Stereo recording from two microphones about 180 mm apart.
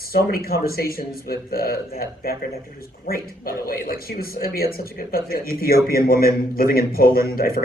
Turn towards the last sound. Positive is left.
turn(degrees=55)  # may be behind; listen again after turning